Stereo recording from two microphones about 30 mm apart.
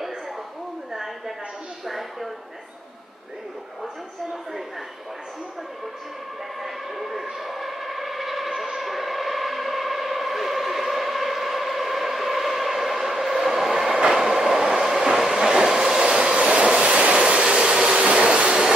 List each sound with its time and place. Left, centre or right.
0.9 s a sound: centre
6.6 s vehicle: centre
8.7 s civil defense siren: centre
14.0 s train: centre
16.3 s train: right
17.9 s a sound: right